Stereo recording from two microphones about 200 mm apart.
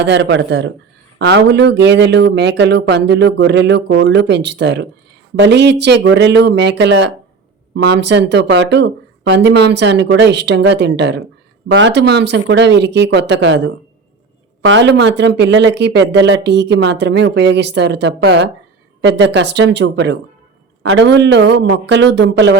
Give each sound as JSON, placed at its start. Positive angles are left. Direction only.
{"t": 0.0, "sound": "speech", "side_deg": -60}